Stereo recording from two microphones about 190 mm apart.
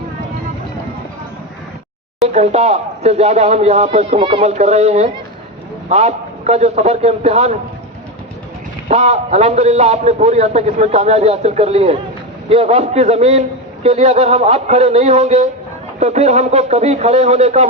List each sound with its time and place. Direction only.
2.2 s a man's voice: 35° right (ahead or behind)
8.9 s a man's voice: 35° right (ahead or behind)